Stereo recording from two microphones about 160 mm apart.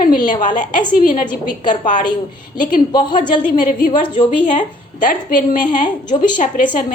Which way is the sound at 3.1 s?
55° left (ahead or behind).